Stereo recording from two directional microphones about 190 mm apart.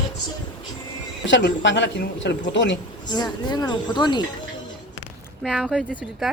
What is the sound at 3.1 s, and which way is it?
Speech, 20° left (ahead or behind).